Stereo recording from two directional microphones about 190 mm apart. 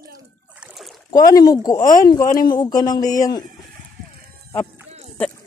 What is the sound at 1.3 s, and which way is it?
Speech, 20° left (ahead or behind).